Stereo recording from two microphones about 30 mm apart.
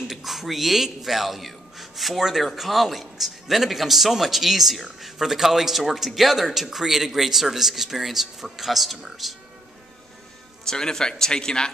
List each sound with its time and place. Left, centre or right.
0.1 s a sound: centre
1.0 s a man's voice: centre
10.6 s a man's voice: left